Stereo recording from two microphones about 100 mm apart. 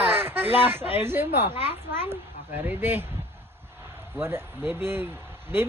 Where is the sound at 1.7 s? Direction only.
25° right (ahead or behind).